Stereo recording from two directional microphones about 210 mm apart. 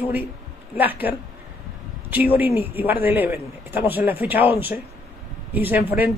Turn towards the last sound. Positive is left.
turn(degrees=-10)  # may be behind; listen again after turning